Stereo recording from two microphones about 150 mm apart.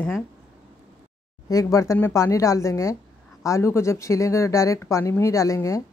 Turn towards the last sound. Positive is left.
turn(degrees=20)  # may be behind; listen again after turning